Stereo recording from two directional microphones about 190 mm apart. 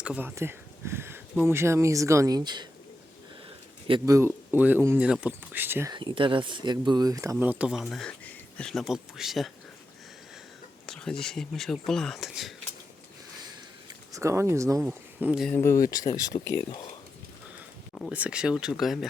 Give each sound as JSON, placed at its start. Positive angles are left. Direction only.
{"t": 0.0, "sound": "speech", "side_deg": -5}
{"t": 3.8, "sound": "speech", "side_deg": -20}
{"t": 5.9, "sound": "speech", "side_deg": -25}
{"t": 10.8, "sound": "speech", "side_deg": 5}
{"t": 14.1, "sound": "speech", "side_deg": -15}
{"t": 15.5, "sound": "speech", "side_deg": 15}
{"t": 18.1, "sound": "speech", "side_deg": -5}